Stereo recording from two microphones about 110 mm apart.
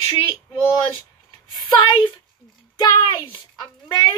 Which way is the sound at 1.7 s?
50° left (ahead or behind).